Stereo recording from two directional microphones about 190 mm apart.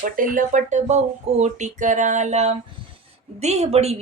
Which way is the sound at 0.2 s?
45° right (ahead or behind).